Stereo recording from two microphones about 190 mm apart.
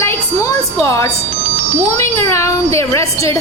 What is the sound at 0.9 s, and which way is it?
Speech, 15° left (ahead or behind).